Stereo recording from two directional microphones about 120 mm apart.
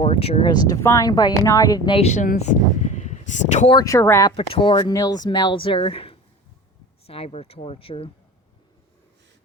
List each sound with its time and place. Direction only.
0.0 s speech: 55° left (ahead or behind)
0.5 s speech: 30° left (ahead or behind)
2.0 s speech: 70° left (ahead or behind)
3.8 s speech: 25° left (ahead or behind)
4.4 s speech: 55° left (ahead or behind)
4.7 s speech: 35° left (ahead or behind); by 8.1 s 50° left (ahead or behind)